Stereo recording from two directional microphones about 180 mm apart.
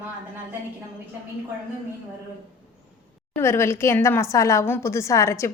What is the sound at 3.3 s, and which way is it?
A woman's voice, 15° left (ahead or behind).